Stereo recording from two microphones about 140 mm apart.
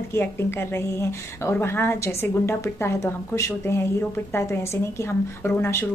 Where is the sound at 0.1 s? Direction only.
15° left (ahead or behind).